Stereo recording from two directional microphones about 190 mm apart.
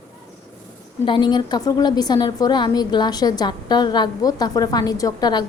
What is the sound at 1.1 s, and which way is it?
A woman's voice, 25° left (ahead or behind).